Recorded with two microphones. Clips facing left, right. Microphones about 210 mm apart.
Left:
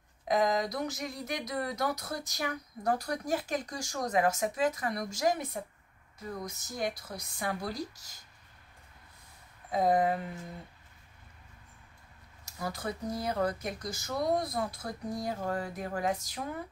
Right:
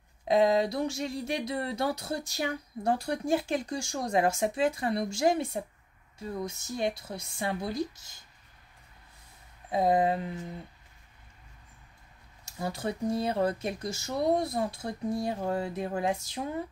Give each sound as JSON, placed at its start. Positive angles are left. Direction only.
{"t": 0.3, "sound": "speech", "side_deg": -30}
{"t": 9.7, "sound": "speech", "side_deg": -25}
{"t": 12.4, "sound": "speech", "side_deg": -25}